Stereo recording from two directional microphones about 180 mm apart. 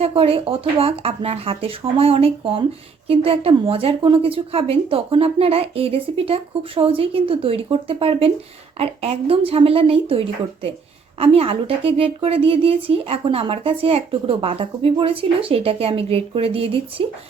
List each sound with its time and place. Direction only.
0.0 s speech: 35° right (ahead or behind)